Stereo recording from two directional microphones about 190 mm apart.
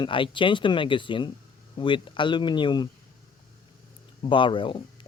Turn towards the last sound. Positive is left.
turn(degrees=25)  # may be behind; listen again after turning